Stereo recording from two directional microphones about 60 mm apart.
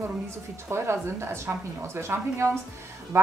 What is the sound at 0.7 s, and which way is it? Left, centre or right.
A woman's voice, right.